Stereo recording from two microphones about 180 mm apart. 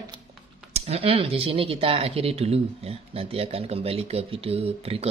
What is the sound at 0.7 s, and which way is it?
Speech, 35° right (ahead or behind).